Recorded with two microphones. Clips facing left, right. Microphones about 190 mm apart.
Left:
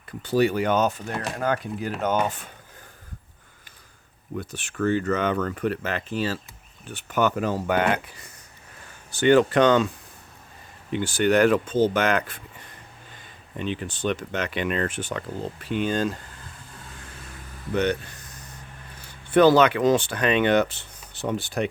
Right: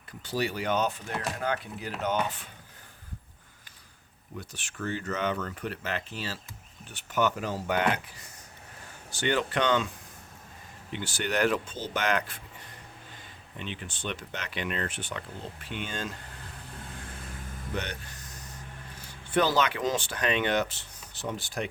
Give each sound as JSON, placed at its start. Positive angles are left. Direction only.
{"t": 0.2, "sound": "speech", "side_deg": 55}
{"t": 4.4, "sound": "speech", "side_deg": 60}
{"t": 10.9, "sound": "speech", "side_deg": 50}
{"t": 13.6, "sound": "speech", "side_deg": 40}
{"t": 15.7, "sound": "speech", "side_deg": 40}
{"t": 19.3, "sound": "speech", "side_deg": 60}